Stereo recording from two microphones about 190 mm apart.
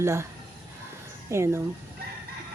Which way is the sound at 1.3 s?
15° right (ahead or behind).